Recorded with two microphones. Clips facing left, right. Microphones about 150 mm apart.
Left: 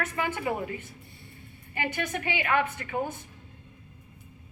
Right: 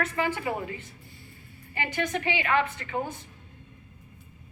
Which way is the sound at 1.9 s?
10° left (ahead or behind).